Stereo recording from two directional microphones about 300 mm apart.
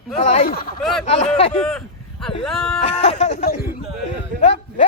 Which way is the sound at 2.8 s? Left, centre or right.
Left.